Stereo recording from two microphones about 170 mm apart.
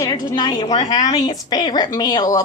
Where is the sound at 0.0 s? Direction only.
20° left (ahead or behind).